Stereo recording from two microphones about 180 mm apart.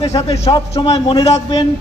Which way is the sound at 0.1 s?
15° left (ahead or behind).